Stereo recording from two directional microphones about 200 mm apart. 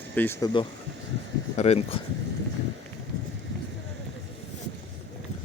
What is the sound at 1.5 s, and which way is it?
Speech, 30° left (ahead or behind).